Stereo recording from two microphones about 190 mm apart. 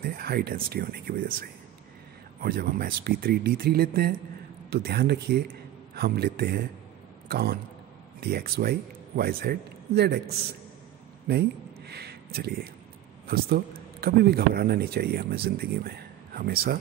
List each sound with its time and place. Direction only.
0.0 s speech: 50° right (ahead or behind)
11.2 s a sound: 55° right (ahead or behind)
13.3 s speech: 55° right (ahead or behind)